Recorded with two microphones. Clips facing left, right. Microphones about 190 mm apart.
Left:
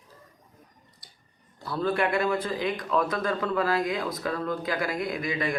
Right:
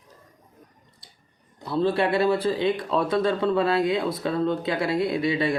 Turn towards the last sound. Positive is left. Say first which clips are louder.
# right 5 dB
turn(degrees=-30)  # may be behind; listen again after turning